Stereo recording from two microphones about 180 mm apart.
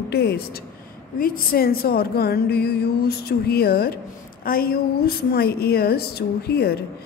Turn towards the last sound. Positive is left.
turn(degrees=60)  # may be behind; listen again after turning